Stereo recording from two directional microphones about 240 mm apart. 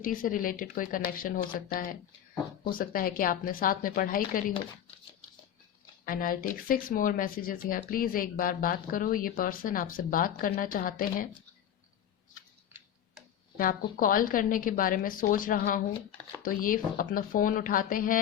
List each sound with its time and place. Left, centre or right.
0.0 s speech: left
6.1 s speech: left
13.9 s speech: left